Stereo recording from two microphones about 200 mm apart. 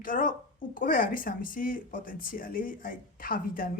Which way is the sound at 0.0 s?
40° left (ahead or behind).